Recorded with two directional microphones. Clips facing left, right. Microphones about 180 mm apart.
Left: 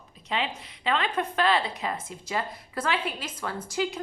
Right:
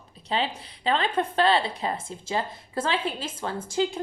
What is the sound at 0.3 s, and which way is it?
A woman's voice, 30° right (ahead or behind).